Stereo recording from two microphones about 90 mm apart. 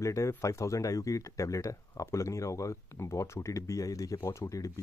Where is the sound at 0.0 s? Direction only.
35° left (ahead or behind).